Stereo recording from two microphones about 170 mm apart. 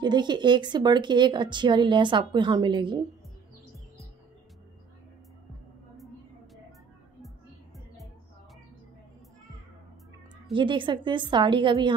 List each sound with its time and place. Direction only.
0.0 s speech: 25° right (ahead or behind)
10.5 s speech: 30° right (ahead or behind)